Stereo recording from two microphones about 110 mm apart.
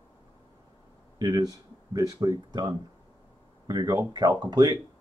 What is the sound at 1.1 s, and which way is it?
Speech, 35° right (ahead or behind).